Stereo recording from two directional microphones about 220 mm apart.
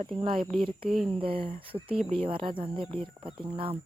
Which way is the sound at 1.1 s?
25° right (ahead or behind).